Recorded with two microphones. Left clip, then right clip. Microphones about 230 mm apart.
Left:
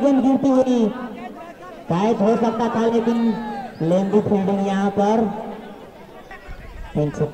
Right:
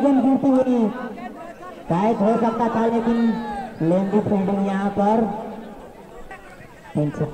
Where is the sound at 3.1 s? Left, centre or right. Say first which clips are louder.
Even; centre.